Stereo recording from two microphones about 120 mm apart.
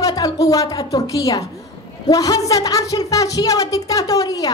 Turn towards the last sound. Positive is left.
turn(degrees=30)  # may be behind; listen again after turning